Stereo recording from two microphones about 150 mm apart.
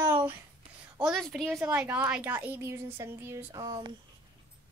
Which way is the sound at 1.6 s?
10° right (ahead or behind).